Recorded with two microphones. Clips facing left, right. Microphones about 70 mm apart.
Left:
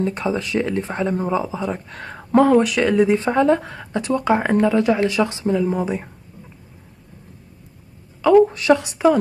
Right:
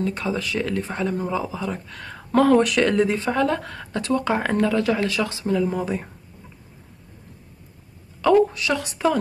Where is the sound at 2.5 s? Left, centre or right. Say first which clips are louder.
Left 2 dB; centre.